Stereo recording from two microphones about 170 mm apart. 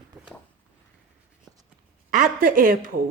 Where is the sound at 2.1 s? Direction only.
55° right (ahead or behind).